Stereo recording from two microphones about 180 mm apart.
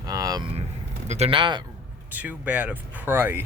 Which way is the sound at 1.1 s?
35° right (ahead or behind).